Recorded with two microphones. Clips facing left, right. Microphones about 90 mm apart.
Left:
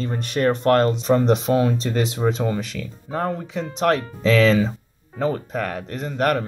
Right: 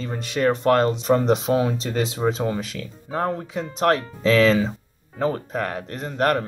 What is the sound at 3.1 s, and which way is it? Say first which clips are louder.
Speech: even; 30° right (ahead or behind).